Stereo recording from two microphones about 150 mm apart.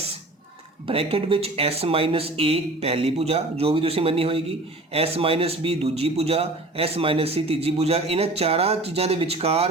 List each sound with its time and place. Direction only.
0.9 s a man's voice: 40° right (ahead or behind)